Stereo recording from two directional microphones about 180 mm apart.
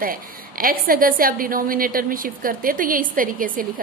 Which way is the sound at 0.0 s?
55° right (ahead or behind).